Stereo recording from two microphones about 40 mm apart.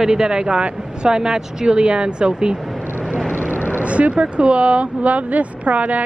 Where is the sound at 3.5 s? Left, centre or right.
Left.